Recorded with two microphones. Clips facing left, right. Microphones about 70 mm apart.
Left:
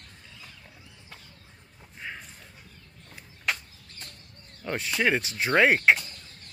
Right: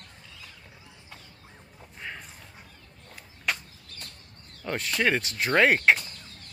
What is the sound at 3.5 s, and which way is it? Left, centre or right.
Bird, centre.